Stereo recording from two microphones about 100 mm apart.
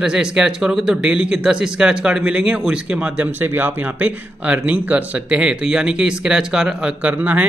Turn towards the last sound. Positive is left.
turn(degrees=-15)  # may be behind; listen again after turning